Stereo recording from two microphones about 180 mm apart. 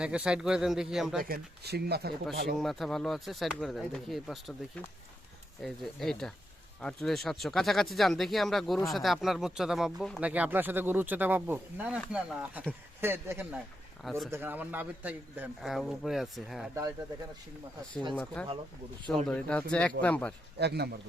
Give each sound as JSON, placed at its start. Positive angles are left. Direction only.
{"t": 0.0, "sound": "a man's voice", "side_deg": -5}
{"t": 1.2, "sound": "speech", "side_deg": -60}
{"t": 2.6, "sound": "a man's voice", "side_deg": 0}
{"t": 5.6, "sound": "a man's voice", "side_deg": 0}
{"t": 14.0, "sound": "a man's voice", "side_deg": 0}
{"t": 14.3, "sound": "a man's voice", "side_deg": -10}
{"t": 18.1, "sound": "speech", "side_deg": 5}
{"t": 20.6, "sound": "speech", "side_deg": -65}